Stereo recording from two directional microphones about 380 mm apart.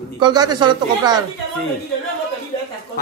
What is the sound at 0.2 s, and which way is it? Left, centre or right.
A man's voice, centre.